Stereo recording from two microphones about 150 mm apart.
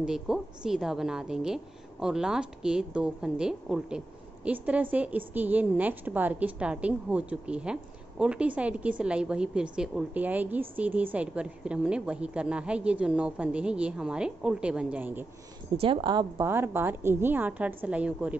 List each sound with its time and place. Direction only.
0.0 s a woman's voice: 5° right (ahead or behind)
15.7 s speech: 35° right (ahead or behind)
16.3 s a woman's voice: 15° right (ahead or behind)